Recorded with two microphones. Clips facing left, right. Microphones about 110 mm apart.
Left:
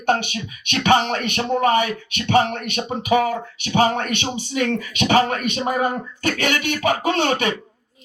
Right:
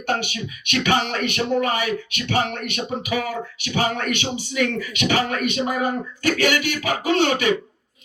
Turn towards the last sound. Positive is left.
turn(degrees=35)  # may be behind; listen again after turning